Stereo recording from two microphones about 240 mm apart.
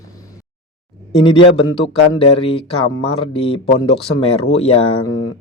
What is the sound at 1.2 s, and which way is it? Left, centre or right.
Speech, left.